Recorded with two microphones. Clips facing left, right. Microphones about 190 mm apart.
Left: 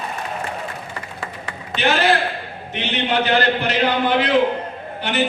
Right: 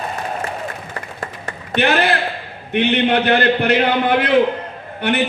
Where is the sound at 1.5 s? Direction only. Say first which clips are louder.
Right 3 dB; 55° right (ahead or behind).